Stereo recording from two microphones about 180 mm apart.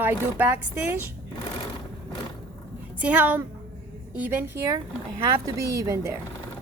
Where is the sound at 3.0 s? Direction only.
10° right (ahead or behind).